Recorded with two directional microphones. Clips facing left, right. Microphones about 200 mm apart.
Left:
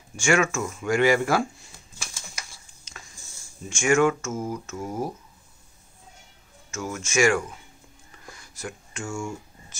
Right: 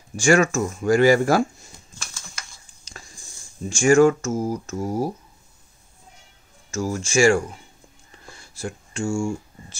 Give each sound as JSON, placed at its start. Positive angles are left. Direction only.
{"t": 0.1, "sound": "speech", "side_deg": -35}
{"t": 3.6, "sound": "speech", "side_deg": -35}
{"t": 6.7, "sound": "speech", "side_deg": -35}
{"t": 8.3, "sound": "a sound", "side_deg": -30}